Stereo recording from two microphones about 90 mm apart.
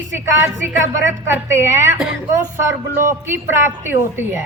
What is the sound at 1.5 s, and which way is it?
Speech, 30° right (ahead or behind).